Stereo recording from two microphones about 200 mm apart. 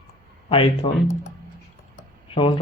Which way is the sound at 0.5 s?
25° left (ahead or behind).